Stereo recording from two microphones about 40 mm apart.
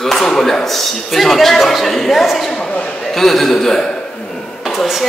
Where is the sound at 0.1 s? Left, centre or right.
Centre.